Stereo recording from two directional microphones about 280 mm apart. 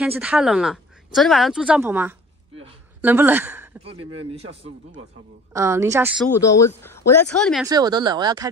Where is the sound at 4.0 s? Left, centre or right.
Right.